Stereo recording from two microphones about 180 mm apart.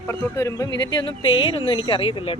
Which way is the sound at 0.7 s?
80° left.